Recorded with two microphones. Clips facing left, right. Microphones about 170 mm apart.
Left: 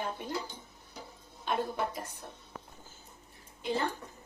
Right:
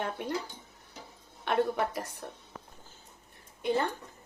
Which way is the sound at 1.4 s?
70° right (ahead or behind).